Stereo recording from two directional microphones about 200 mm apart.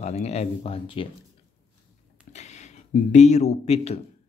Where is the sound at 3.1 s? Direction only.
35° left (ahead or behind).